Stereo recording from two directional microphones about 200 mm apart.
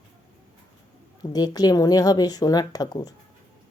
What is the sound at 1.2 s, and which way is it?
A woman's voice, 20° left (ahead or behind).